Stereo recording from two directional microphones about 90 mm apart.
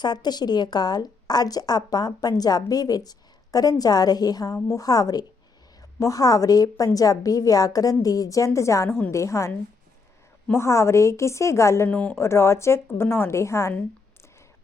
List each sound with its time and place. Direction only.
0.0 s a woman's voice: 50° left (ahead or behind); by 9.5 s 35° left (ahead or behind)
10.5 s a woman's voice: 30° left (ahead or behind)
11.9 s speech: 15° left (ahead or behind)
12.1 s a woman's voice: 30° left (ahead or behind)